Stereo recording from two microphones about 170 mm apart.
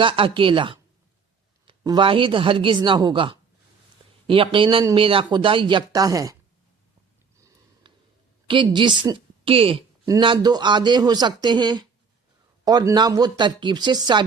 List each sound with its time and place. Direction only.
0.0 s speech: 30° right (ahead or behind)
1.8 s speech: 25° right (ahead or behind)
7.3 s sniff: 20° right (ahead or behind)
8.4 s a woman's voice: 30° right (ahead or behind)